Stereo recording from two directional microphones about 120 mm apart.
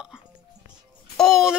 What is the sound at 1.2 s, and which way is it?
Speech, centre (ahead or behind).